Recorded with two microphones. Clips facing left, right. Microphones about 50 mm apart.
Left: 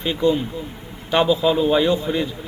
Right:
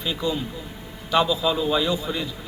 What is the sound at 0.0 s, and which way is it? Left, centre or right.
A man's voice, left.